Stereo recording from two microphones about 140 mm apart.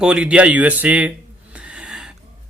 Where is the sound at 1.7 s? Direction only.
5° right (ahead or behind).